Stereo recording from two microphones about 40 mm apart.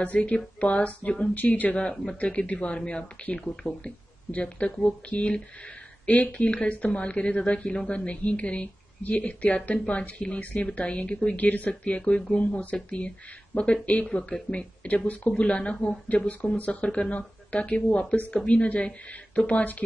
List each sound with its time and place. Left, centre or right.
0.0 s speech: left
1.3 s speech: left
1.8 s a woman's voice: left
2.1 s a woman's voice: left
4.3 s speech: left
4.6 s a woman's voice: left
11.3 s a woman's voice: left
17.8 s a woman's voice: left